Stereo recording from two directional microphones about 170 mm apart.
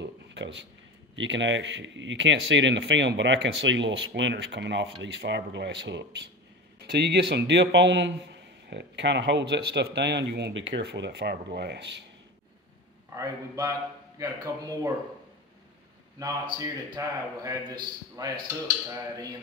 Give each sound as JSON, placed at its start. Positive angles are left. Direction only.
{"t": 0.0, "sound": "a sound", "side_deg": -90}
{"t": 1.1, "sound": "a man's voice", "side_deg": -90}
{"t": 6.9, "sound": "a man's voice", "side_deg": -75}
{"t": 13.1, "sound": "a man's voice", "side_deg": -20}
{"t": 16.5, "sound": "a man's voice", "side_deg": -20}